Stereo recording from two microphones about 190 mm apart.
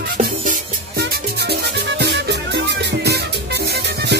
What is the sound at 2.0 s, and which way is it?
Music, 60° right (ahead or behind).